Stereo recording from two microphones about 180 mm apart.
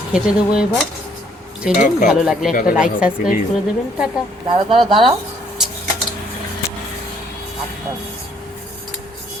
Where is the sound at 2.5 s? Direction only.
50° left (ahead or behind).